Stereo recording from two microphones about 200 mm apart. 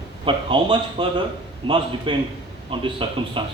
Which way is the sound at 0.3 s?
25° right (ahead or behind).